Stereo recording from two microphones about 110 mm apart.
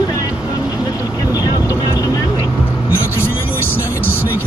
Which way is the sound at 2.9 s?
20° left (ahead or behind).